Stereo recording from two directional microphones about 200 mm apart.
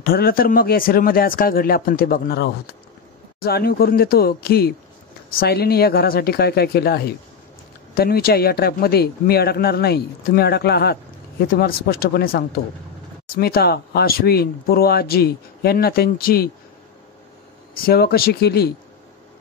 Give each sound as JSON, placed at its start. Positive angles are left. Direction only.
{"t": 0.0, "sound": "speech", "side_deg": 50}
{"t": 17.8, "sound": "speech", "side_deg": 50}